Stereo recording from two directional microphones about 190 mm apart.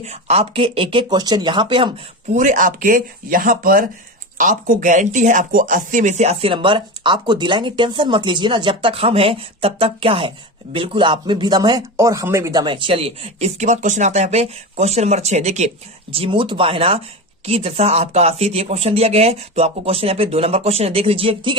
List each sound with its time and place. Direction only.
0.0 s speech: 35° right (ahead or behind)
2.3 s speech: 40° right (ahead or behind)